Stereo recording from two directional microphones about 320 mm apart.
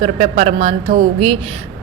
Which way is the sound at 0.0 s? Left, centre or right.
Centre.